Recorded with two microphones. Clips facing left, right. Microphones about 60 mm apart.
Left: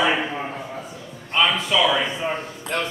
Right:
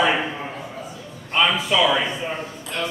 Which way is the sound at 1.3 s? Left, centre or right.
Centre.